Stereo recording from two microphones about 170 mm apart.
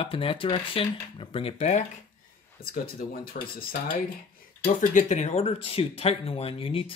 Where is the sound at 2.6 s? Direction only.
60° left (ahead or behind).